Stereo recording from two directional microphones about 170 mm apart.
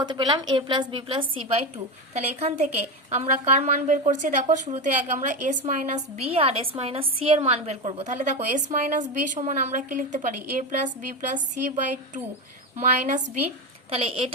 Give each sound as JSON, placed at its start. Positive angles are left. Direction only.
{"t": 0.0, "sound": "a woman's voice", "side_deg": -25}
{"t": 11.8, "sound": "speech", "side_deg": -45}
{"t": 13.9, "sound": "a woman's voice", "side_deg": -35}